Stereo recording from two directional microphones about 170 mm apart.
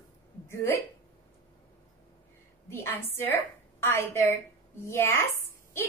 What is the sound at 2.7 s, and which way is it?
A woman's voice, 15° left (ahead or behind).